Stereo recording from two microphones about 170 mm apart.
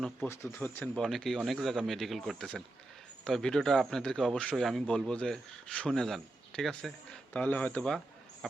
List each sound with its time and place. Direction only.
0.5 s a man's voice: 15° left (ahead or behind)